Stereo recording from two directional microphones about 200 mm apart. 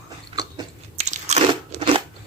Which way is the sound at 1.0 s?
35° right (ahead or behind).